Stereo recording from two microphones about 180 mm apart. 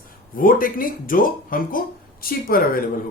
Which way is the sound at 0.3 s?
50° left (ahead or behind).